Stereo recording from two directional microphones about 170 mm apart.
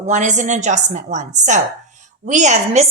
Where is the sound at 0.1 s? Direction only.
45° right (ahead or behind).